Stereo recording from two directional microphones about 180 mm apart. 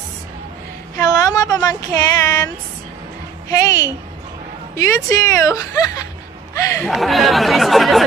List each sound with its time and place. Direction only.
0.9 s a sound: 20° left (ahead or behind)
3.4 s a woman's voice: 20° left (ahead or behind)
6.8 s speech: centre (ahead or behind)